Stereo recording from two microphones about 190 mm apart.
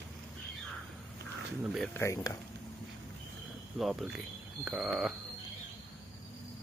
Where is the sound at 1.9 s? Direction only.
15° left (ahead or behind).